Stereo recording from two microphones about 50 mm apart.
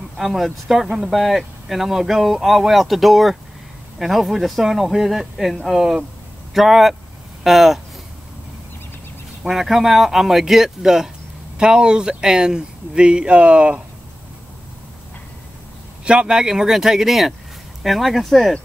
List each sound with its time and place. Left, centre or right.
0.2 s speech: centre
9.5 s speech: centre; by 13.8 s right
16.1 s speech: centre